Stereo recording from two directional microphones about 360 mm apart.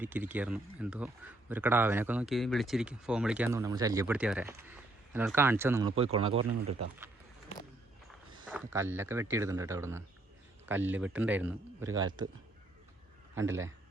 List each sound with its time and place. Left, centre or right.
0.0 s speech: centre
8.4 s speech: centre